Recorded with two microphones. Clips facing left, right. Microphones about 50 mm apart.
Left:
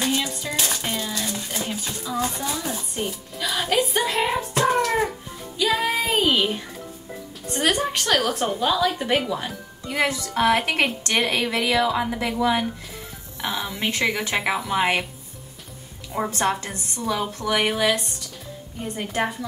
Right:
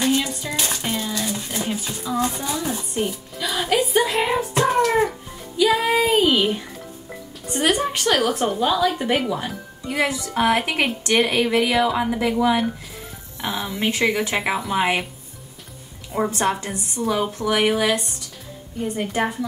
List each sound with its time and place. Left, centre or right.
0.1 s a sound: centre
1.9 s a woman's voice: centre
5.6 s child singing: centre
7.8 s a woman's voice: centre
16.3 s a woman's voice: centre